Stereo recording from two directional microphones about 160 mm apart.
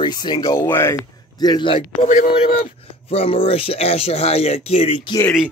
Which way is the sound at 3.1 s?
35° left (ahead or behind).